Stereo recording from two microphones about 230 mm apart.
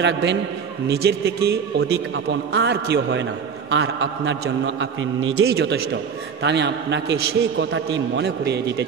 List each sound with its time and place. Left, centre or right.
0.0 s a man's voice: right
5.5 s a man's voice: right